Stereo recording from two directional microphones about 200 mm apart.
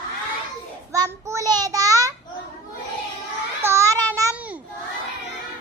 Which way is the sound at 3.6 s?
15° right (ahead or behind).